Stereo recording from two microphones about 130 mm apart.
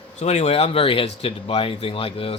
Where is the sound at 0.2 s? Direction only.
60° left (ahead or behind).